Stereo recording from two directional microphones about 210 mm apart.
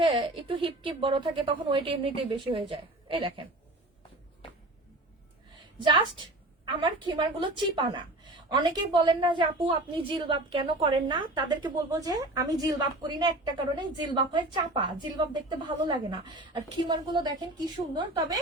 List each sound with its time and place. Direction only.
0.0 s a woman's voice: 25° right (ahead or behind)
5.8 s a woman's voice: 20° right (ahead or behind)